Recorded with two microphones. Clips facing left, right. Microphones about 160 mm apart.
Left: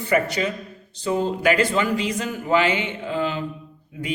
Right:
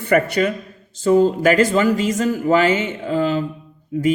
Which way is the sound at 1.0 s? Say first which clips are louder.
Right 7 dB; 45° right (ahead or behind).